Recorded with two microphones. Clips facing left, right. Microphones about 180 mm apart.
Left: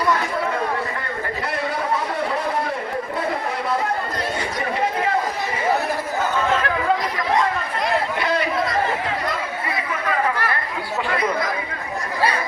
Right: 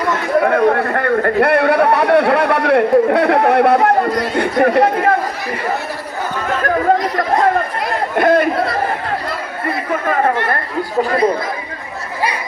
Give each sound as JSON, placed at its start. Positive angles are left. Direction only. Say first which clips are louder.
{"t": 0.4, "sound": "a man's voice", "louder": "right 10 dB", "side_deg": -65}
{"t": 6.6, "sound": "chatter", "louder": "right 6 dB", "side_deg": -45}